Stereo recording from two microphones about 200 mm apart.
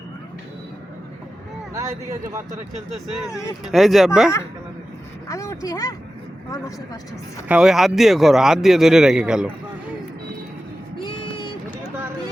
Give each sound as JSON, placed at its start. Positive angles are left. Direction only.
{"t": 1.7, "sound": "speech", "side_deg": -15}
{"t": 3.7, "sound": "speech", "side_deg": 0}
{"t": 5.3, "sound": "speech", "side_deg": 15}
{"t": 7.4, "sound": "speech", "side_deg": -5}
{"t": 11.0, "sound": "a sound", "side_deg": 25}